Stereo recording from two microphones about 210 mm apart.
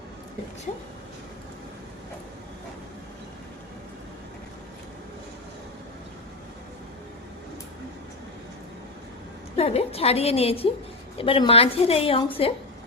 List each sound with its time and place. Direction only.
9.6 s a woman's voice: 30° left (ahead or behind)